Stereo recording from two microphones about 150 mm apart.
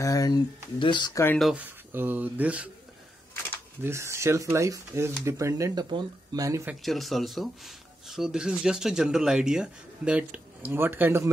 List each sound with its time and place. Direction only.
0.0 s speech: 25° left (ahead or behind)
1.4 s speech: 10° right (ahead or behind)
3.8 s speech: 20° right (ahead or behind)
6.6 s speech: 5° right (ahead or behind)